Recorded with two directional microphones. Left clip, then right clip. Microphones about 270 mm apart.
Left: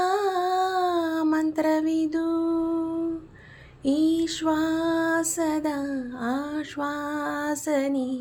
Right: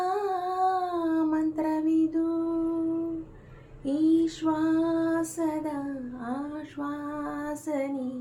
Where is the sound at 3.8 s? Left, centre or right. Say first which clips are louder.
Left 1 dB; left.